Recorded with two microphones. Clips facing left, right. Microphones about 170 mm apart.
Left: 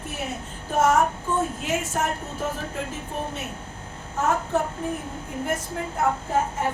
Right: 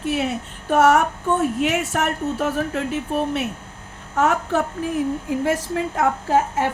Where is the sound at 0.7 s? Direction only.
70° right (ahead or behind).